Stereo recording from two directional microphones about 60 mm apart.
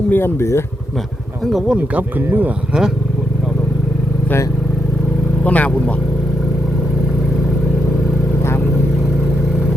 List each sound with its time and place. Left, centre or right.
0.1 s speech: left
2.0 s speech: right
5.5 s speech: left